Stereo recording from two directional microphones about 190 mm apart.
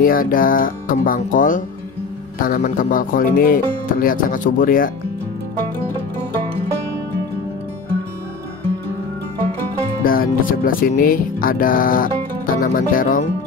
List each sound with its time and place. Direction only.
0.0 s speech: 50° left (ahead or behind)
10.0 s speech: 50° left (ahead or behind)